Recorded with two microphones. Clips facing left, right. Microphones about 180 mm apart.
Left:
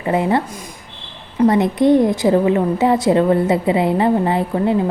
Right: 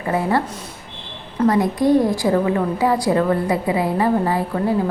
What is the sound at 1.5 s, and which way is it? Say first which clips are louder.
A woman's voice: left 3 dB; 20° left (ahead or behind).